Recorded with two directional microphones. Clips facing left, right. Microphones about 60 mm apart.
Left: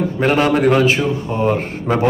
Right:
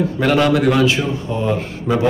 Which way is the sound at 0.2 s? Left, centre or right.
Left.